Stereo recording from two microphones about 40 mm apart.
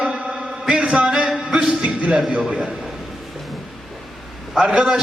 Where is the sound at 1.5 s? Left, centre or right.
Centre.